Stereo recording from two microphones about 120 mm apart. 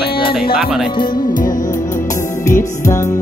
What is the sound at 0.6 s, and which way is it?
Speech, 5° right (ahead or behind).